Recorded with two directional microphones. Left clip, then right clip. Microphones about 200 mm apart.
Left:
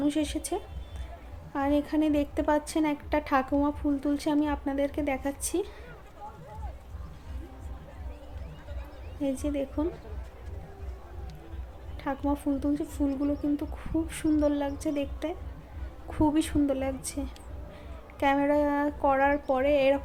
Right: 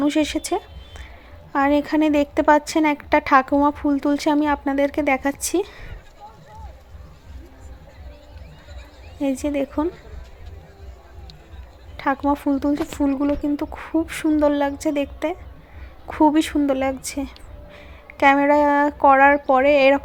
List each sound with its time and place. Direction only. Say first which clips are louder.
0.0 s speech: right 9 dB; 20° right (ahead or behind)
9.2 s speech: right 8 dB; 20° right (ahead or behind)
11.9 s a woman's voice: right 10 dB; 20° right (ahead or behind)